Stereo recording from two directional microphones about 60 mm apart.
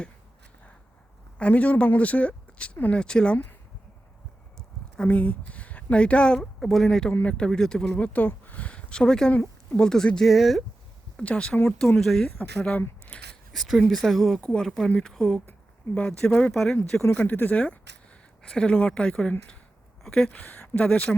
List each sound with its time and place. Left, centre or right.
1.4 s speech: left
5.0 s speech: left
6.6 s speech: centre
7.9 s speech: centre
10.2 s speech: centre
11.2 s speech: centre
11.9 s speech: centre
12.5 s speech: centre
13.5 s speech: centre
14.4 s speech: centre
17.1 s speech: left; by 20.3 s centre
20.3 s speech: left